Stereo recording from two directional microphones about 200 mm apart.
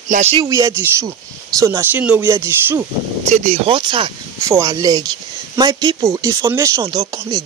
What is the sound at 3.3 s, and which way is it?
Speech, 35° right (ahead or behind).